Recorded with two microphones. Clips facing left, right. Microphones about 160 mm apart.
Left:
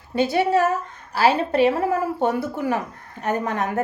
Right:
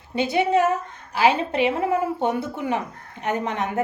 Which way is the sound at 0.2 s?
20° right (ahead or behind).